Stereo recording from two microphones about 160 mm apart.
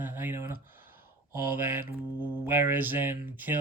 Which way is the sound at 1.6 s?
15° right (ahead or behind).